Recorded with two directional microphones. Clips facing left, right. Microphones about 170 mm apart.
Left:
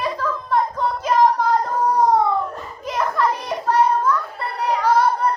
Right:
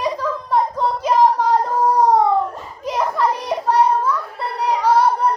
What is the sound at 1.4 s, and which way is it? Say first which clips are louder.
Baby cry: right 2 dB; 10° right (ahead or behind).